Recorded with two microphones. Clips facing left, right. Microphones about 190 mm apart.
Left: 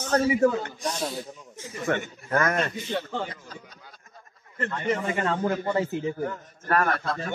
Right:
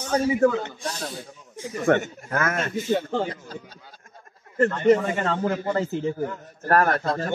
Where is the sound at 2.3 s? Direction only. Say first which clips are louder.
Left 1 dB; 5° right (ahead or behind).